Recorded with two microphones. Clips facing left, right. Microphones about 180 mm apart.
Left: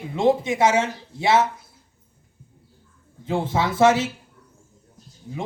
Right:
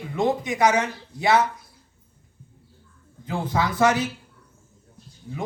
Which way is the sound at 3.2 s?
25° left (ahead or behind).